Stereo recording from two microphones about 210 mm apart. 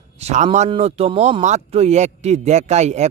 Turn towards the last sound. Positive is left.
turn(degrees=-30)  # may be behind; listen again after turning